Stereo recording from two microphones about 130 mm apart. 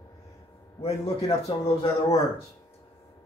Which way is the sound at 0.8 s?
50° left (ahead or behind).